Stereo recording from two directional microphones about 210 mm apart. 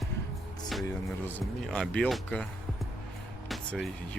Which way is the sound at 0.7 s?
Centre (ahead or behind).